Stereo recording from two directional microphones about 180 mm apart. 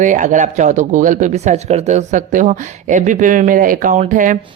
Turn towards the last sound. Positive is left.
turn(degrees=-45)  # may be behind; listen again after turning